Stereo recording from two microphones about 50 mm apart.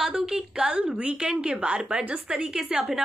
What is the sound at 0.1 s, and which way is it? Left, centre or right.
A woman's voice, centre.